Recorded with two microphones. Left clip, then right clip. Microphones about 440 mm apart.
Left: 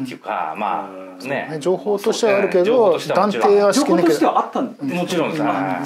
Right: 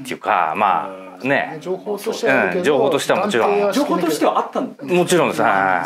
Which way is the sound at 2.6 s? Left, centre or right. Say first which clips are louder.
Left 1 dB; right.